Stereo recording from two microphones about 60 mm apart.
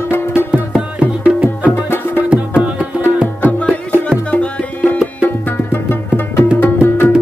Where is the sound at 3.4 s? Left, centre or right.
Left.